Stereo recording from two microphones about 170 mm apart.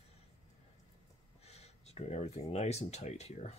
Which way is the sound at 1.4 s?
40° left (ahead or behind).